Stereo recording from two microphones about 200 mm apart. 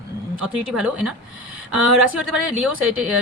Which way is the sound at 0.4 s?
5° right (ahead or behind).